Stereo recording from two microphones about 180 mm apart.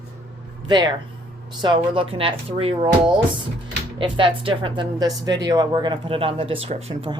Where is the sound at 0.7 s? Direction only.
25° right (ahead or behind).